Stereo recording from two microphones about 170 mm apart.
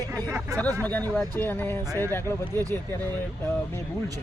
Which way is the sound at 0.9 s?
10° left (ahead or behind).